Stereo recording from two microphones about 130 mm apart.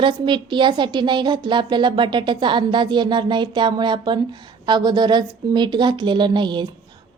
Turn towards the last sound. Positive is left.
turn(degrees=-35)  # may be behind; listen again after turning